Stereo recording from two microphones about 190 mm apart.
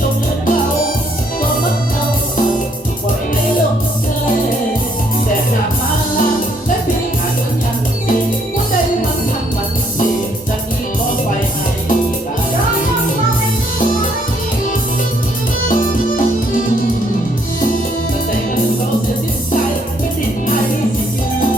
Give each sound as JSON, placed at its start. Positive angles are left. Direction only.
{"t": 15.7, "sound": "music", "side_deg": 45}